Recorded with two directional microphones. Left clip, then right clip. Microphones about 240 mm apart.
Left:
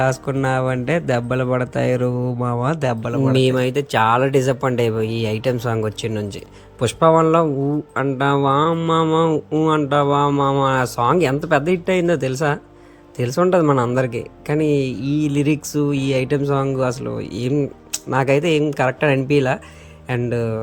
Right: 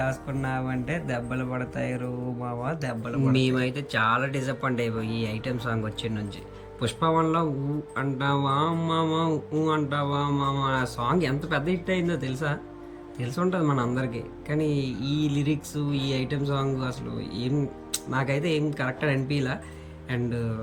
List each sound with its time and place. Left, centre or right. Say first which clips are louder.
0.0 s speech: left 10 dB; left